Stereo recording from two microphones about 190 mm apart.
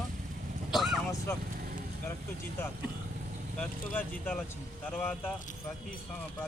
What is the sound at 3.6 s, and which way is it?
Speech, 10° left (ahead or behind).